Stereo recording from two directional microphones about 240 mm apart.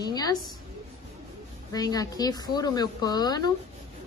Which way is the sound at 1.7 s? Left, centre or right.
Centre.